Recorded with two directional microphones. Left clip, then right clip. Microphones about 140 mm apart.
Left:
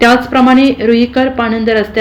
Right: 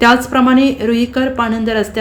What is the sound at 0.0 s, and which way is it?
A woman's voice, 35° right (ahead or behind).